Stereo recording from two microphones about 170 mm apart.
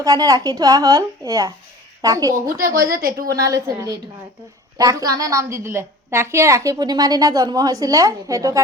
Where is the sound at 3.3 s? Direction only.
20° right (ahead or behind).